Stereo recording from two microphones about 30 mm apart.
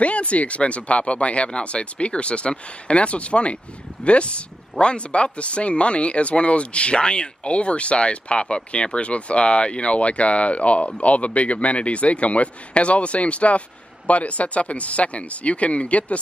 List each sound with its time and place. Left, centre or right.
0.0 s a man's voice: left